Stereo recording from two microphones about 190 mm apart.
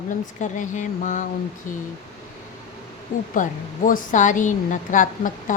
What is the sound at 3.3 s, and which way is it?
A woman's voice, 45° left (ahead or behind).